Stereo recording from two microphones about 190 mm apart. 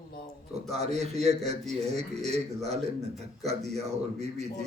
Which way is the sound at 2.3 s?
35° right (ahead or behind).